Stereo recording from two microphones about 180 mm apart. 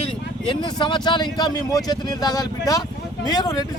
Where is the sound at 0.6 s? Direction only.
25° left (ahead or behind).